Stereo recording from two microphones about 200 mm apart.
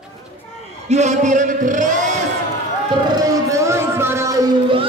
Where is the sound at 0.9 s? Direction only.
35° right (ahead or behind).